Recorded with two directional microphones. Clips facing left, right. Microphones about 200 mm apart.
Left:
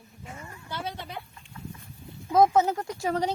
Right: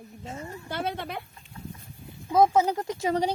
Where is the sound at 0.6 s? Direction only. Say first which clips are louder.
Right 4 dB; 55° right (ahead or behind).